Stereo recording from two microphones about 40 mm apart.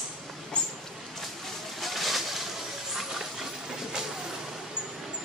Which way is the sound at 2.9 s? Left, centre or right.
Centre.